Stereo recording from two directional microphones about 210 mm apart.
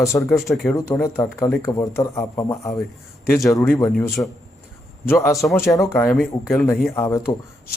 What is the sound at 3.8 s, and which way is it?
Speech, 15° left (ahead or behind).